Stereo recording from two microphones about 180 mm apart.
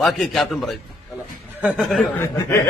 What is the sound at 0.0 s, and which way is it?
Speech, centre (ahead or behind).